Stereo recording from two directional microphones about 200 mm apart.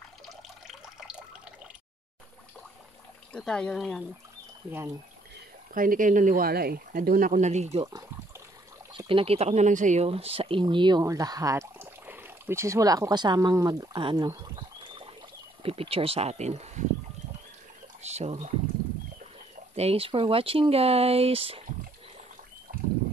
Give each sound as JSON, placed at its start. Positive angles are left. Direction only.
{"t": 0.7, "sound": "water tap", "side_deg": 0}
{"t": 3.3, "sound": "speech", "side_deg": 5}
{"t": 4.6, "sound": "speech", "side_deg": -10}
{"t": 5.8, "sound": "speech", "side_deg": -40}
{"t": 8.9, "sound": "speech", "side_deg": -25}
{"t": 18.0, "sound": "a sound", "side_deg": -35}
{"t": 19.7, "sound": "speech", "side_deg": -30}